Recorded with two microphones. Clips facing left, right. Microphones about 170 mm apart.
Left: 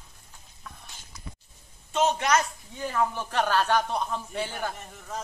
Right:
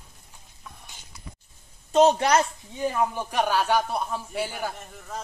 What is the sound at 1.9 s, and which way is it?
Speech, 35° right (ahead or behind).